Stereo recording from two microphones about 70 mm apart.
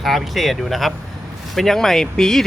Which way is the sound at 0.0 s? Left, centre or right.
Centre.